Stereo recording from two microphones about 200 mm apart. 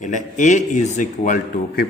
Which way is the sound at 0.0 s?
40° left (ahead or behind).